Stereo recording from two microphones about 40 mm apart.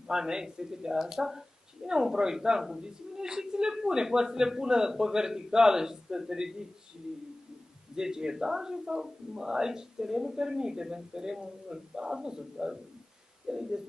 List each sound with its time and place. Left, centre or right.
0.1 s speech: centre
7.9 s speech: centre